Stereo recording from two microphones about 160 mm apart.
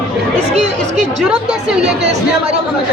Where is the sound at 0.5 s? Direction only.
45° right (ahead or behind).